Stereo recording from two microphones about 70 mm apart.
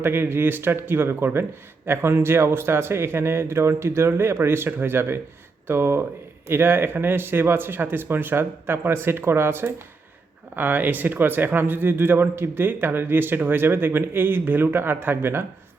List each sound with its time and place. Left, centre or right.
0.0 s a man's voice: right